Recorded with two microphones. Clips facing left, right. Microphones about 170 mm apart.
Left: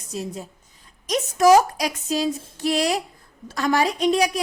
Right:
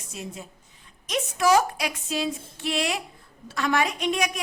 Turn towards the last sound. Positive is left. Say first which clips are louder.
# left 6 dB
turn(degrees=35)  # may be behind; listen again after turning